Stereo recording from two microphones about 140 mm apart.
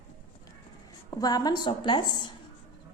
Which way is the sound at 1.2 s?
30° left (ahead or behind).